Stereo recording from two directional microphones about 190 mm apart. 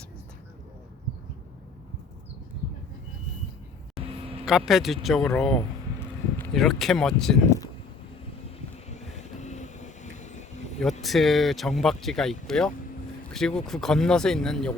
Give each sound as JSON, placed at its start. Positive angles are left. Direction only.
{"t": 4.4, "sound": "speech", "side_deg": 0}
{"t": 8.9, "sound": "vehicle", "side_deg": 40}
{"t": 11.0, "sound": "speech", "side_deg": 0}